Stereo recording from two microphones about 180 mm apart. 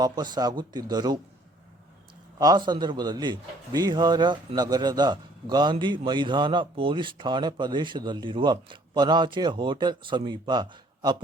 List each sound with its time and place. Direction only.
0.0 s speech: 20° right (ahead or behind)
2.4 s speech: 20° right (ahead or behind)